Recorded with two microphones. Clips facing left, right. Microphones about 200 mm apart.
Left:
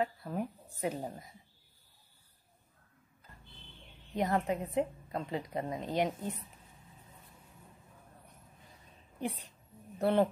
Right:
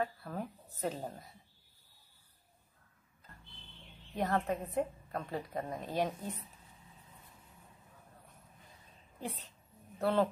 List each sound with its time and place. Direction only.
0.0 s a woman's voice: 20° left (ahead or behind)
4.1 s a woman's voice: 15° left (ahead or behind)
9.9 s speech: 20° left (ahead or behind)